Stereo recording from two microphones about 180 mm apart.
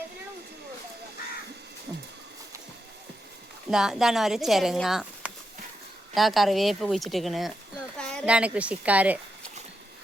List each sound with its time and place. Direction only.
3.7 s speech: 5° right (ahead or behind)
7.9 s a sound: 5° left (ahead or behind)
8.3 s speech: 5° right (ahead or behind)